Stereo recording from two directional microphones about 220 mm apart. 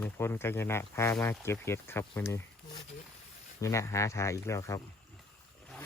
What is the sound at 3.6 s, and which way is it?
Speech, 15° left (ahead or behind).